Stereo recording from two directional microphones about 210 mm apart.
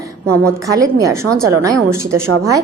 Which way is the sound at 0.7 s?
15° right (ahead or behind).